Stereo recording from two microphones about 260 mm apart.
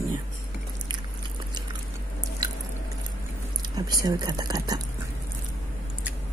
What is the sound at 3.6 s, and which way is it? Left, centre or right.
Speech, centre.